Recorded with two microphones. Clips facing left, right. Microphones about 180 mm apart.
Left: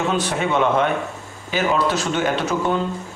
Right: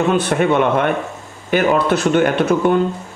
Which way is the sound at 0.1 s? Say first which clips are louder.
Right 5 dB; 55° right (ahead or behind).